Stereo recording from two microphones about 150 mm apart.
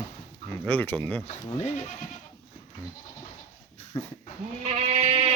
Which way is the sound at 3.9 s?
25° left (ahead or behind).